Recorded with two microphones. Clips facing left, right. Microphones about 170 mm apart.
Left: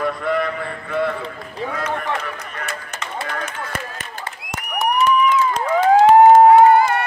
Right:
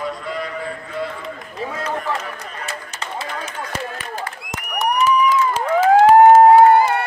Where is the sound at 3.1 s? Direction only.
55° left (ahead or behind).